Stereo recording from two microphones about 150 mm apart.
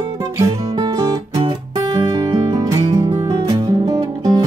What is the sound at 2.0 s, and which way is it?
Music, 25° right (ahead or behind).